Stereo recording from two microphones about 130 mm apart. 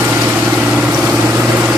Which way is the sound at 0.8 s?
10° right (ahead or behind).